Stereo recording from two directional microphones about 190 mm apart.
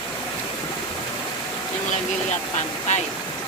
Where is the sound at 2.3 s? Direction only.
35° left (ahead or behind).